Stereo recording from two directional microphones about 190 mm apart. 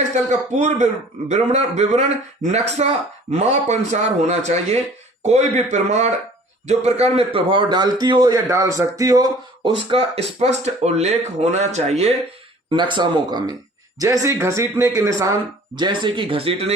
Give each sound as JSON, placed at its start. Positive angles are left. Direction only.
{"t": 0.1, "sound": "a man's voice", "side_deg": -35}
{"t": 12.7, "sound": "a man's voice", "side_deg": -25}